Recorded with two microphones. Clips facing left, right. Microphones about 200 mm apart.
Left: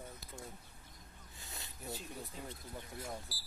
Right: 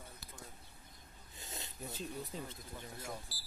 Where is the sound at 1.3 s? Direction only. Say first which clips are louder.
Right 4 dB; 20° right (ahead or behind).